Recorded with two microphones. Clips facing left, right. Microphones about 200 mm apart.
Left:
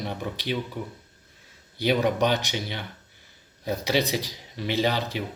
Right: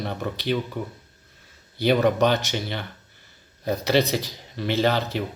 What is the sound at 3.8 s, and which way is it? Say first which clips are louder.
Speech: right 4 dB; 15° left (ahead or behind).